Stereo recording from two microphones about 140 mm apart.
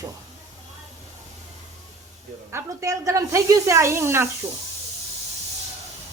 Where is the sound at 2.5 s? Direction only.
20° right (ahead or behind).